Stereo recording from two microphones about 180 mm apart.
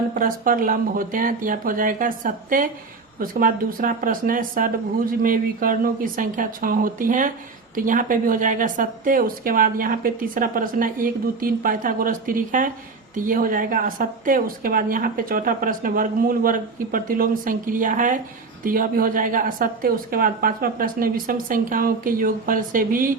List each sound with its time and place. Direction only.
0.1 s speech: 50° right (ahead or behind)